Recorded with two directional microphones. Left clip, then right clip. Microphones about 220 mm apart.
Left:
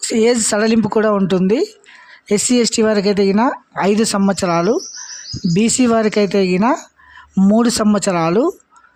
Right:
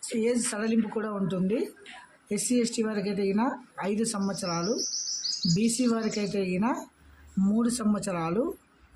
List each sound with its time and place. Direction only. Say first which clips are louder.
0.1 s speech: left 14 dB; 45° left (ahead or behind)